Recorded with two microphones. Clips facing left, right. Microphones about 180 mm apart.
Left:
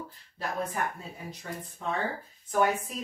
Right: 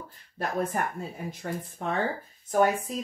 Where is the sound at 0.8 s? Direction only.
50° right (ahead or behind).